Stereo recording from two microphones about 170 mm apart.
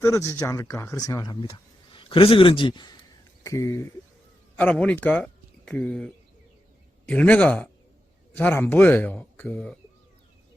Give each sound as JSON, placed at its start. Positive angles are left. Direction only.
{"t": 0.0, "sound": "a man's voice", "side_deg": 15}
{"t": 4.5, "sound": "a man's voice", "side_deg": 5}